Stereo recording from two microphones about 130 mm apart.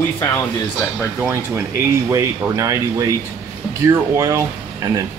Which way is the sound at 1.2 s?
20° right (ahead or behind).